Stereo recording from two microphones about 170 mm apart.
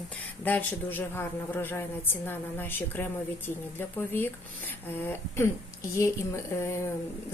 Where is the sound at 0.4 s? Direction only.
10° left (ahead or behind).